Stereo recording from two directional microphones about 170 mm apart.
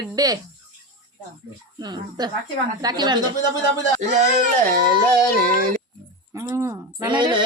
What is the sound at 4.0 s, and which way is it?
Speech, 40° right (ahead or behind).